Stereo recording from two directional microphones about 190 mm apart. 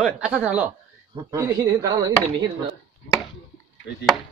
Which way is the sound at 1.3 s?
20° right (ahead or behind).